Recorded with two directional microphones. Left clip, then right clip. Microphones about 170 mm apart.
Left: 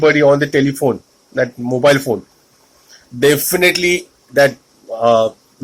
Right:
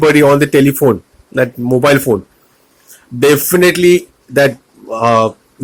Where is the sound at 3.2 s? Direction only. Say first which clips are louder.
Right 3 dB; 45° right (ahead or behind).